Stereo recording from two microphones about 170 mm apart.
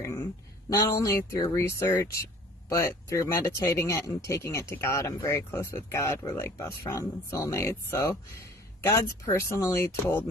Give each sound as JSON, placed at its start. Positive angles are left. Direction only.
{"t": 0.7, "sound": "speech", "side_deg": 20}